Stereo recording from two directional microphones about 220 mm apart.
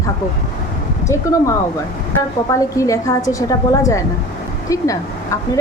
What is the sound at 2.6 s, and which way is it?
Speech, 15° left (ahead or behind).